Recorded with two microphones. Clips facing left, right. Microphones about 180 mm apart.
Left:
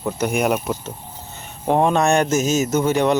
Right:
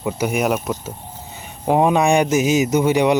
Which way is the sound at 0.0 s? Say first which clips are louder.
Even; 5° right (ahead or behind).